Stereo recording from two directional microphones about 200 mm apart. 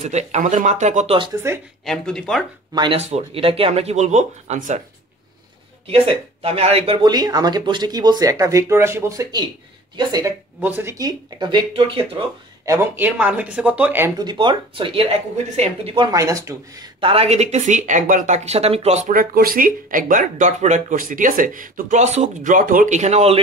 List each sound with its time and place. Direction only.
0.0 s speech: 35° right (ahead or behind)
1.9 s speech: 5° left (ahead or behind)
2.7 s speech: 20° right (ahead or behind)
3.0 s speech: 30° right (ahead or behind)
5.9 s speech: 30° right (ahead or behind)
12.6 s speech: 10° right (ahead or behind); by 23.4 s 30° right (ahead or behind)